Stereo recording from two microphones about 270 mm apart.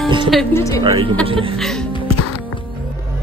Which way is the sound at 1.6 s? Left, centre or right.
Centre.